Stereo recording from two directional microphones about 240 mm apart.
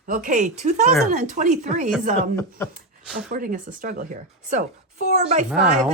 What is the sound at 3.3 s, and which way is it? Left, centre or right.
Speech, right.